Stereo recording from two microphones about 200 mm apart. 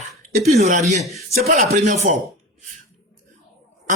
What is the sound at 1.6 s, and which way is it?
Speech, 35° right (ahead or behind).